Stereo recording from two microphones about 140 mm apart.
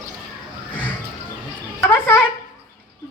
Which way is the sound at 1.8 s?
15° left (ahead or behind).